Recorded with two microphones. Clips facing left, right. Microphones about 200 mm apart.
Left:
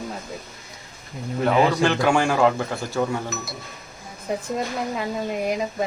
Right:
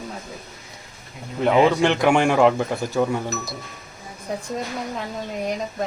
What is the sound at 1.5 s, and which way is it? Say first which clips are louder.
A man's voice: right 3 dB; 20° right (ahead or behind).